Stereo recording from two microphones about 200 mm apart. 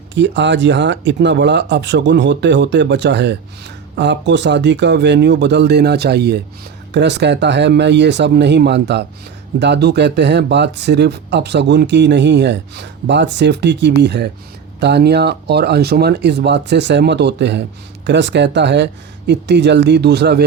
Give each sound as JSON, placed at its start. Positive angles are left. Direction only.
{"t": 0.1, "sound": "speech", "side_deg": -65}